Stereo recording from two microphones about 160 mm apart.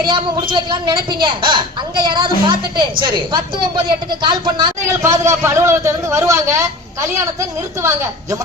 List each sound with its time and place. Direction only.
0.0 s a woman's voice: 30° right (ahead or behind)